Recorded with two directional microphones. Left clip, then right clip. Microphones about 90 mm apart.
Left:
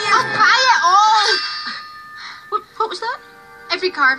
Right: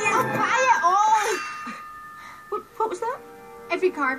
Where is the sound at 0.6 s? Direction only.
15° left (ahead or behind).